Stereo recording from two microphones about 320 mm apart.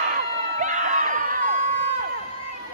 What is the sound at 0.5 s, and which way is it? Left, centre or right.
Crowd, right.